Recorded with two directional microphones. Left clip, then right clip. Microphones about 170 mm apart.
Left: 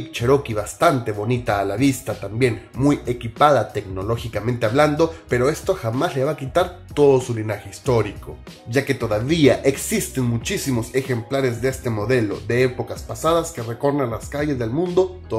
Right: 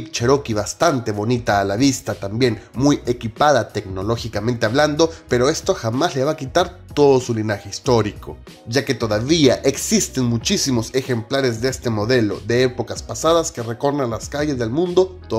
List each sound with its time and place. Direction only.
0.2 s speech: 40° right (ahead or behind)
8.7 s speech: 30° right (ahead or behind)